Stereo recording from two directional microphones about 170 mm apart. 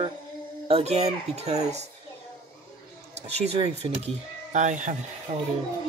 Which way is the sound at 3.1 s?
40° right (ahead or behind).